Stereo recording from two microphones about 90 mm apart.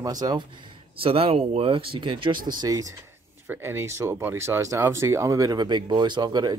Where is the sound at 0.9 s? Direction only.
90° right; by 2.7 s 55° right (ahead or behind).